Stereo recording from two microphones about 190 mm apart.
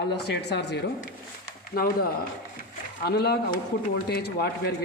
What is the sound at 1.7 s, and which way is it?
A man's voice, 50° left (ahead or behind).